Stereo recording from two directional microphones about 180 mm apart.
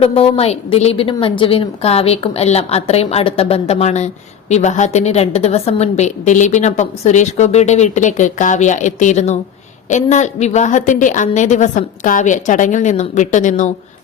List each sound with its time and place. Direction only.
0.0 s a woman's voice: 35° left (ahead or behind)